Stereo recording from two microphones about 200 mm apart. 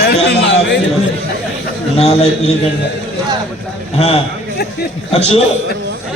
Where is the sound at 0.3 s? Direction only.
60° left (ahead or behind).